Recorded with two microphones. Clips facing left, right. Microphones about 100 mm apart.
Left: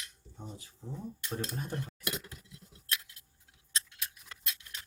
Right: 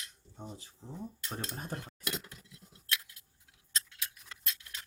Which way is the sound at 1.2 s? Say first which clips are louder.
Left 4 dB; 35° right (ahead or behind).